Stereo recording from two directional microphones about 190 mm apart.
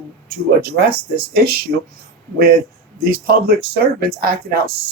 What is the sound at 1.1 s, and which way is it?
Speech, 55° right (ahead or behind).